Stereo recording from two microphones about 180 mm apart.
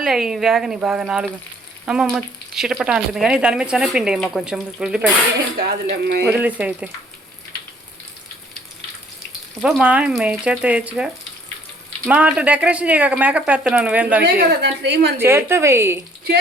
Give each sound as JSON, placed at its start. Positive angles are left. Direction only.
{"t": 0.0, "sound": "speech", "side_deg": 0}
{"t": 5.5, "sound": "speech", "side_deg": -65}
{"t": 6.2, "sound": "speech", "side_deg": -10}
{"t": 9.6, "sound": "speech", "side_deg": 0}
{"t": 14.3, "sound": "a woman's voice", "side_deg": -65}
{"t": 15.2, "sound": "speech", "side_deg": -15}